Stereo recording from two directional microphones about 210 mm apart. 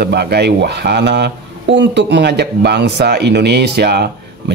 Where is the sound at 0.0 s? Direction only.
50° right (ahead or behind).